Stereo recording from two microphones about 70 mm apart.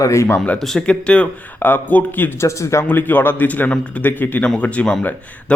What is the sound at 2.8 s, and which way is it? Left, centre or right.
A man's voice, left.